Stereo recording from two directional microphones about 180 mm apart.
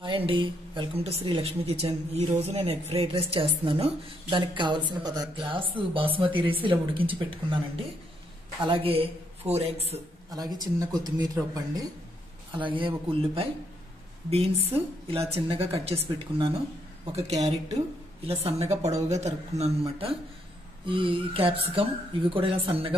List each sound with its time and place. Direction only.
0.0 s speech: 30° right (ahead or behind)
10.3 s speech: 20° right (ahead or behind)
14.7 s speech: 35° right (ahead or behind)
20.8 s speech: 30° right (ahead or behind)